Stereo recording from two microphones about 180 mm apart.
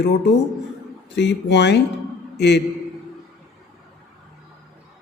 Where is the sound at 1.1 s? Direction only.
75° left (ahead or behind).